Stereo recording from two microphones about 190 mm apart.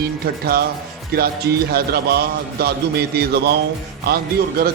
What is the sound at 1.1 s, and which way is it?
A man's voice, 50° right (ahead or behind).